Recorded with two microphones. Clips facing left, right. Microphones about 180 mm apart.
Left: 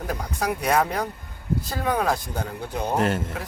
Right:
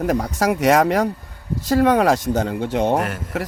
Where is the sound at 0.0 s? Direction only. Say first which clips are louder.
Right 8 dB; 90° right.